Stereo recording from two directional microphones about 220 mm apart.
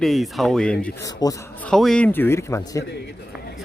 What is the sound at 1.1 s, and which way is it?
Speech, 15° left (ahead or behind).